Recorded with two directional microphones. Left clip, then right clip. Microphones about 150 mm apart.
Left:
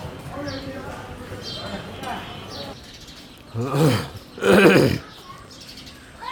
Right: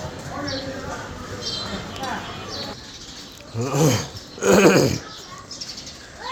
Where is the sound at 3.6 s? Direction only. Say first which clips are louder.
Even; 30° left (ahead or behind); by 5.0 s 45° left (ahead or behind).